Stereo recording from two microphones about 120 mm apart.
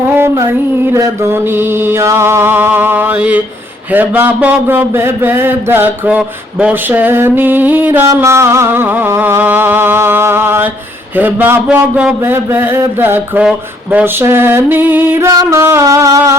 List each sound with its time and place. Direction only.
0.1 s female singing: 20° right (ahead or behind)
0.9 s speech: 20° right (ahead or behind)
14.0 s mantra: 20° right (ahead or behind)
15.3 s mantra: 25° right (ahead or behind)